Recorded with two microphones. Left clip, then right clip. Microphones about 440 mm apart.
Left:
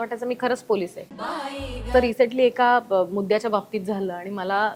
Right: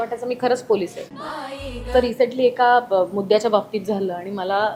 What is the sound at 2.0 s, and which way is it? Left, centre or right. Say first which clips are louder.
A woman's voice: right 1 dB; left.